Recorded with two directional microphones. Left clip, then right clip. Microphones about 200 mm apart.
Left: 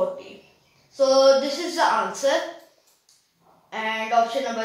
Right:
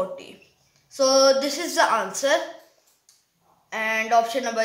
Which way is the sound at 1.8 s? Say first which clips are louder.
Even; 20° right (ahead or behind).